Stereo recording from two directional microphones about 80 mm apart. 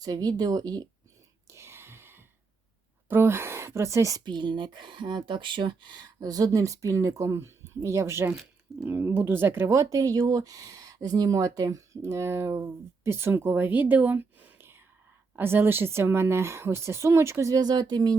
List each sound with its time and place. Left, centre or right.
0.0 s speech: right
1.5 s a sound: right
3.1 s speech: right
4.2 s speech: right
17.5 s speech: right